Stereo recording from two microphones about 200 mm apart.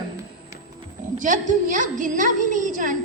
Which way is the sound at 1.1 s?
40° right (ahead or behind).